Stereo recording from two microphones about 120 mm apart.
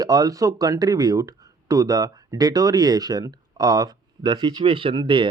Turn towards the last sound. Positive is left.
turn(degrees=-45)  # may be behind; listen again after turning